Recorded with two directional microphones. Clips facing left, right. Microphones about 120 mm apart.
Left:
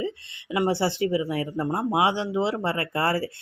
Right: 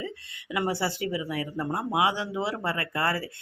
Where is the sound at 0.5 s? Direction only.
25° left (ahead or behind).